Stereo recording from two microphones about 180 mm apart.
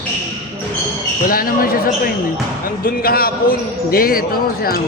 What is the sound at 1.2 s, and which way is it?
Speech, 55° left (ahead or behind).